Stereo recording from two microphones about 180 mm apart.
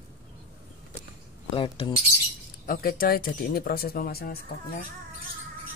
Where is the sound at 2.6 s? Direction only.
55° left (ahead or behind).